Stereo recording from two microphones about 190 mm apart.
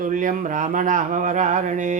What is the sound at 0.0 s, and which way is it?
Speech, 45° right (ahead or behind).